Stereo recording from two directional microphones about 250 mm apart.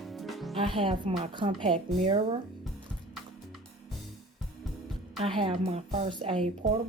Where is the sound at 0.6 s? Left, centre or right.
Right.